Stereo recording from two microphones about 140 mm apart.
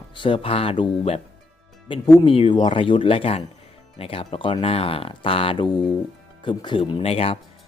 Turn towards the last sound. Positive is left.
turn(degrees=45)  # may be behind; listen again after turning